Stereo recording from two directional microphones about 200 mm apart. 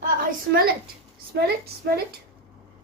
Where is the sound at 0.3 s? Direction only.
50° right (ahead or behind).